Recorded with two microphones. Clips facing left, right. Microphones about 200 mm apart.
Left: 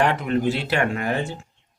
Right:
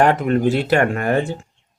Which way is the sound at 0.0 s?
45° right (ahead or behind).